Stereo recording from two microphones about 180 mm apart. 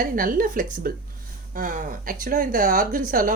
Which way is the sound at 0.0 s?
50° right (ahead or behind).